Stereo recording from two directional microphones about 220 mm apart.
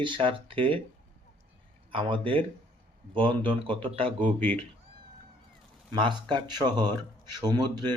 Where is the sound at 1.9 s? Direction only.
25° right (ahead or behind).